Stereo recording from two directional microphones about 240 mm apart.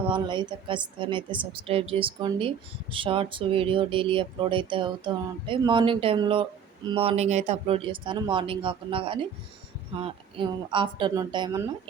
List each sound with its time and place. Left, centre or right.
0.1 s speech: centre